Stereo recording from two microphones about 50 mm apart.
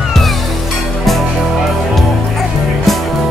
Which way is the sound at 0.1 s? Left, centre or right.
Centre.